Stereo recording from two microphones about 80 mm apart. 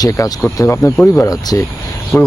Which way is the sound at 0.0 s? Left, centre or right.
Left.